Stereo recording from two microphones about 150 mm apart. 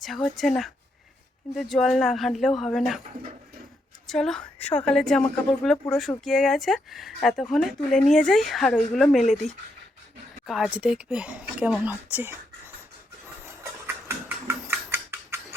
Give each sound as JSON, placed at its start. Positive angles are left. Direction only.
{"t": 0.0, "sound": "speech", "side_deg": 0}
{"t": 4.0, "sound": "speech", "side_deg": 0}
{"t": 10.4, "sound": "speech", "side_deg": 0}
{"t": 13.8, "sound": "a sound", "side_deg": -15}